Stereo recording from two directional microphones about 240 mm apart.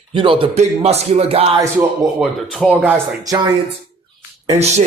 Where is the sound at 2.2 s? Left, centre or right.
Centre.